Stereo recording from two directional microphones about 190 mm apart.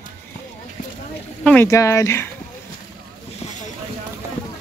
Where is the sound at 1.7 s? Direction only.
15° left (ahead or behind).